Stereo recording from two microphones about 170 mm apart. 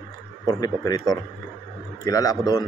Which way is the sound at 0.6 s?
20° left (ahead or behind).